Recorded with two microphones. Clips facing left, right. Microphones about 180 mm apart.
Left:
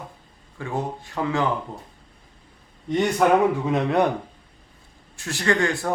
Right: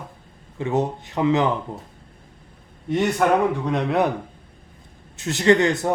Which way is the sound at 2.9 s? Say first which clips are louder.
Even; centre (ahead or behind).